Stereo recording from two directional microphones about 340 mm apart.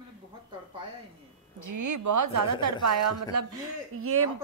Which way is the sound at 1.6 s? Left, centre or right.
Right.